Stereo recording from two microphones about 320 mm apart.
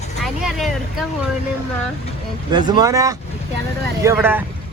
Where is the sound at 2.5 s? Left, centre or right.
Centre.